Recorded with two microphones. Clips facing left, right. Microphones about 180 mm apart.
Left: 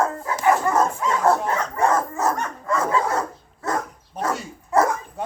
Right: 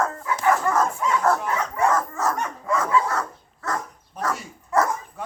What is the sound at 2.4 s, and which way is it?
Dog, 10° right (ahead or behind).